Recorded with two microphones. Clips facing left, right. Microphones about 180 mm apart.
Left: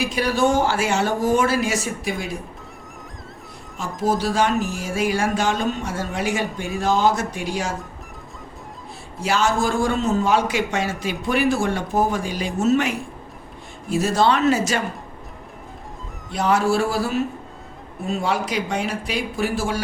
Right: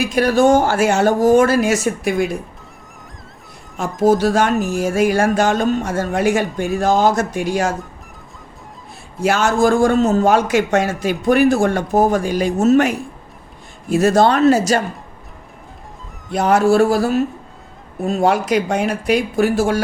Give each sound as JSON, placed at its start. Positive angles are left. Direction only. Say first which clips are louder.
{"t": 0.1, "sound": "a man's voice", "louder": "right 9 dB", "side_deg": -45}
{"t": 3.8, "sound": "a man's voice", "louder": "right 8 dB", "side_deg": -50}
{"t": 9.2, "sound": "a man's voice", "louder": "right 6 dB", "side_deg": -50}
{"t": 16.3, "sound": "a man's voice", "louder": "right 6 dB", "side_deg": -50}